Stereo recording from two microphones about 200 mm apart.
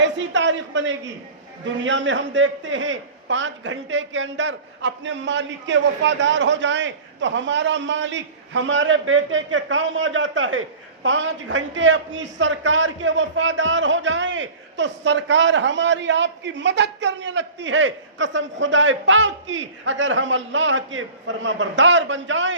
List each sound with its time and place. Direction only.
0.0 s a man's voice: 65° right (ahead or behind)